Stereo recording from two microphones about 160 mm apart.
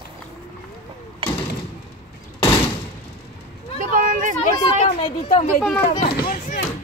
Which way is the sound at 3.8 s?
55° right (ahead or behind).